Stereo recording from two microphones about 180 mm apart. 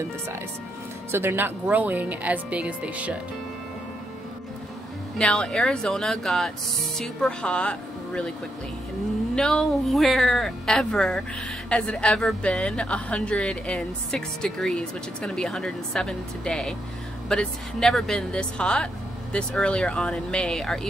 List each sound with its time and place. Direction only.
1.1 s speech: 10° right (ahead or behind)
5.1 s speech: 5° left (ahead or behind)
9.3 s speech: 5° left (ahead or behind)